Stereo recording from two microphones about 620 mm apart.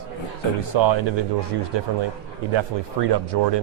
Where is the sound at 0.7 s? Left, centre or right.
Right.